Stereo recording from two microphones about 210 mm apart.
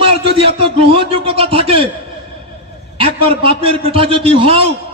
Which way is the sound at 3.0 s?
25° right (ahead or behind).